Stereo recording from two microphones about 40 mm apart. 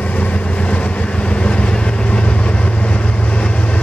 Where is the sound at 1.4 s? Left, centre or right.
Left.